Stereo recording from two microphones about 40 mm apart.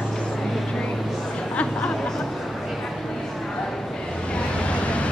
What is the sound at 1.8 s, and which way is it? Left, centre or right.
Chatter, left.